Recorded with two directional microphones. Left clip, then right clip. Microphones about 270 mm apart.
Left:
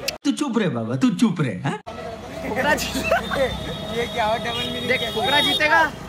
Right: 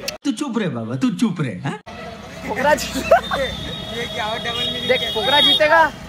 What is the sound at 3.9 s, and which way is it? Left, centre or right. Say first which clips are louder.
Speech: left 3 dB; centre.